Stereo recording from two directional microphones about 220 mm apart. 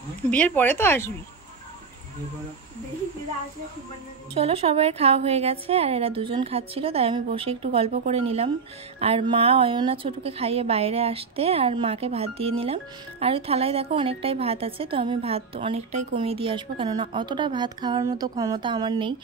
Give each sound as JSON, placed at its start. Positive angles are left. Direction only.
{"t": 0.3, "sound": "a woman's voice", "side_deg": 5}
{"t": 4.3, "sound": "a woman's voice", "side_deg": -25}